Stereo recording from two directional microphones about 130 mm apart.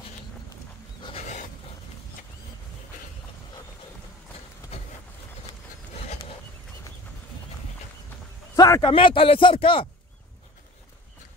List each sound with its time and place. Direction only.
1.2 s a sound: 65° left (ahead or behind)
4.7 s vehicle: 50° left (ahead or behind)
8.5 s a man's voice: 30° left (ahead or behind)
8.9 s speech: 40° left (ahead or behind)